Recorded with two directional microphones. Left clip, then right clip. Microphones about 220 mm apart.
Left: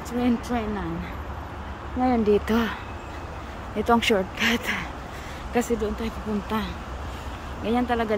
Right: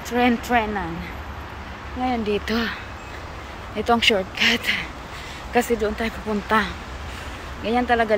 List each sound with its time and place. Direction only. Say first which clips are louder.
0.2 s speech: right 7 dB; centre (ahead or behind)
2.0 s speech: left 2 dB; 20° left (ahead or behind)